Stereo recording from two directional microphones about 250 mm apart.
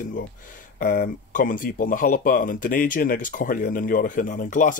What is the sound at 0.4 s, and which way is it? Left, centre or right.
Speech, left.